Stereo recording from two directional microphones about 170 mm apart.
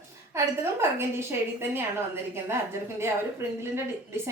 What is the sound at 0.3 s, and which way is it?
A woman's voice, 15° right (ahead or behind).